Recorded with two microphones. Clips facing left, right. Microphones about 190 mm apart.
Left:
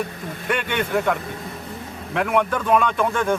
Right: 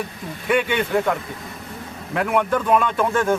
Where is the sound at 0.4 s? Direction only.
5° right (ahead or behind).